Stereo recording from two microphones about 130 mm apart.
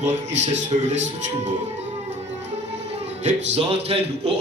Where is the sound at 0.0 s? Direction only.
60° right (ahead or behind).